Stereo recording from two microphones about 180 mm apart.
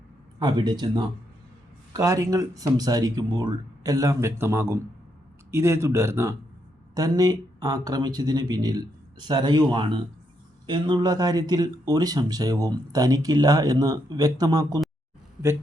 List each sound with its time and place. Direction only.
0.3 s speech: 25° right (ahead or behind)